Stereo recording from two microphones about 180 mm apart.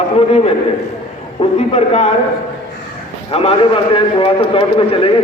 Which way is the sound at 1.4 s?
35° left (ahead or behind).